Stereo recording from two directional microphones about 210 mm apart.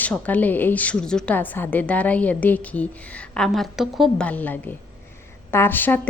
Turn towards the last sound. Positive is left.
turn(degrees=10)  # may be behind; listen again after turning